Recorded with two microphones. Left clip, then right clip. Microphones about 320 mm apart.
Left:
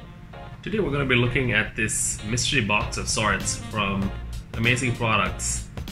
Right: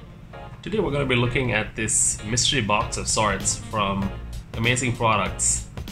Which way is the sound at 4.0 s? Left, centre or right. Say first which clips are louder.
Right 1 dB; centre.